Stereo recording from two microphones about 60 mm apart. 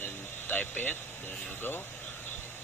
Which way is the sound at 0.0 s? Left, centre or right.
Left.